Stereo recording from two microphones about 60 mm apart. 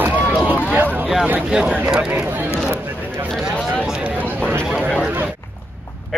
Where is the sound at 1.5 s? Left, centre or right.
Centre.